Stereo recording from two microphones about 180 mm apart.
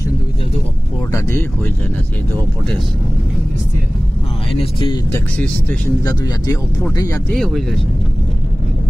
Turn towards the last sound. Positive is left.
turn(degrees=0)  # may be behind; listen again after turning